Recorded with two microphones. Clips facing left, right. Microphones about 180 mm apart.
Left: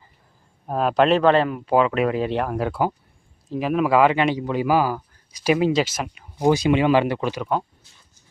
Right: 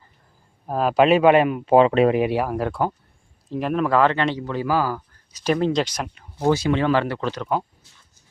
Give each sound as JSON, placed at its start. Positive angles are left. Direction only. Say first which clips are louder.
{"t": 0.7, "sound": "speech", "louder": "right 1 dB", "side_deg": 0}
{"t": 2.2, "sound": "speech", "louder": "right 1 dB", "side_deg": -5}